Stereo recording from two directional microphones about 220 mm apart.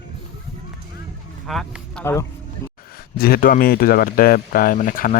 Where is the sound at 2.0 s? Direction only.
15° left (ahead or behind).